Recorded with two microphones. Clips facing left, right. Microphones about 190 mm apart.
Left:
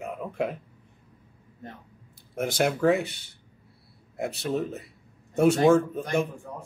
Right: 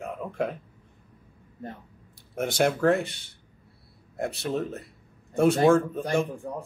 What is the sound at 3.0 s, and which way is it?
Speech, 60° right (ahead or behind).